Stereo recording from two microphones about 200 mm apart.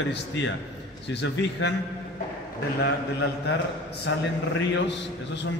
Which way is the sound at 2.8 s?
60° left (ahead or behind).